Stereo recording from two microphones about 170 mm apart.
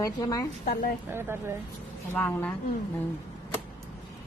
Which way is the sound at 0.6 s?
60° left (ahead or behind).